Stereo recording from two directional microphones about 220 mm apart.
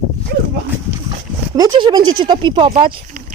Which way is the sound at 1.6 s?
20° right (ahead or behind).